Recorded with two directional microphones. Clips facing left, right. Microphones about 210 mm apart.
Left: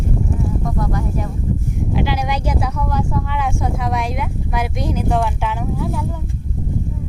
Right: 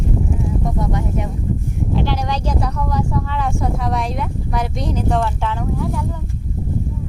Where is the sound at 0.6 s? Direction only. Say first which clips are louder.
Even; 20° right (ahead or behind).